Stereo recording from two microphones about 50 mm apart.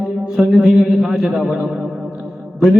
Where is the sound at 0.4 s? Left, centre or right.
Centre.